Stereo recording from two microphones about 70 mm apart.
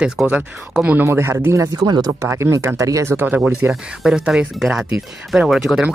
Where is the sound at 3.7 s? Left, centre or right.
Centre.